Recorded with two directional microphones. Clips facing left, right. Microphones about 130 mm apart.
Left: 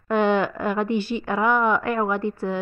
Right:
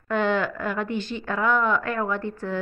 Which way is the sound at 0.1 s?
15° left (ahead or behind).